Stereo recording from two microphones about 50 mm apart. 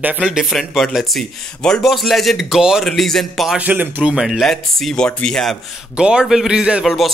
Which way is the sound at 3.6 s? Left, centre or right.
Right.